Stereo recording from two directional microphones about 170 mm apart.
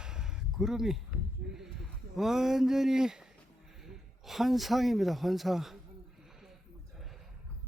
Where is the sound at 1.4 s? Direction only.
70° right (ahead or behind).